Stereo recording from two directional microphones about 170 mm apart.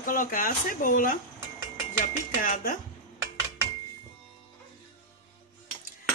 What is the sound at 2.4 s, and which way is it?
Speech, 55° left (ahead or behind).